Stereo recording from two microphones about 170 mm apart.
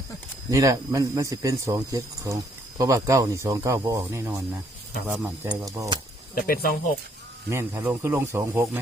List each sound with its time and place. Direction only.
0.5 s a man's voice: 20° right (ahead or behind)
5.6 s a man's voice: 20° right (ahead or behind)
6.3 s speech: 60° left (ahead or behind)
7.5 s speech: 15° right (ahead or behind)